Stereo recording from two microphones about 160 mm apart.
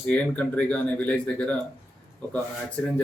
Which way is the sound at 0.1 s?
10° left (ahead or behind).